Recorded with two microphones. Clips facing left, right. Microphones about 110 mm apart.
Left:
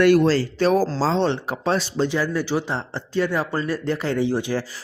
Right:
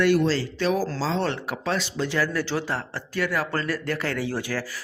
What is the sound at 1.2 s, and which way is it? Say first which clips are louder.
Speech: left 5 dB; 25° left (ahead or behind).